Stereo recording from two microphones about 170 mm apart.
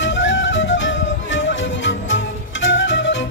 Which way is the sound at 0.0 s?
90° left.